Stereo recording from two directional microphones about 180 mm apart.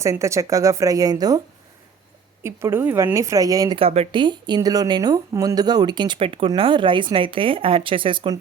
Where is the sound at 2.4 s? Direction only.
15° right (ahead or behind).